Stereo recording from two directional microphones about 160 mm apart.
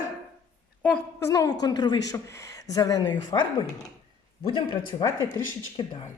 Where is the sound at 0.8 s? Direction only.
10° left (ahead or behind).